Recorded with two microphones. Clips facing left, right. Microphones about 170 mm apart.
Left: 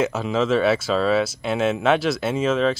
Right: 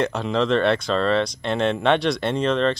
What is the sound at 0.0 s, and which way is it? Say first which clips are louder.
Speech: even; 5° left (ahead or behind).